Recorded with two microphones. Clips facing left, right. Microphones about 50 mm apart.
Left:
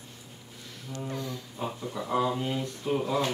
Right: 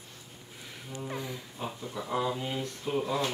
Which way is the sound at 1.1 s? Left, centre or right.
Centre.